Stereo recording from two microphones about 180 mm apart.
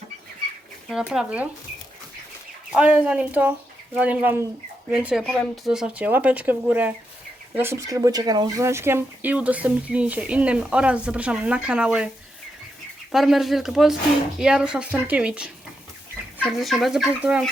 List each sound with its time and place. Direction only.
0.9 s speech: centre (ahead or behind)
2.7 s speech: 5° right (ahead or behind)
13.1 s speech: centre (ahead or behind)